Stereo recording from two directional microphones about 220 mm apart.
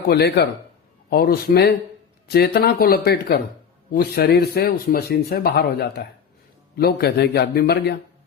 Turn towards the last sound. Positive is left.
turn(degrees=45)  # may be behind; listen again after turning